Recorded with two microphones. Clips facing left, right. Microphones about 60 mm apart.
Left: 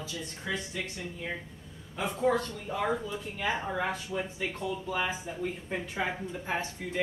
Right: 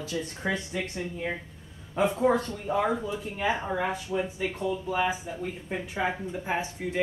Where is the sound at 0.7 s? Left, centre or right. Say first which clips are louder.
Right 5 dB; right.